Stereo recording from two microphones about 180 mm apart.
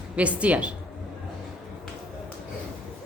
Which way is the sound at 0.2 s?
5° right (ahead or behind).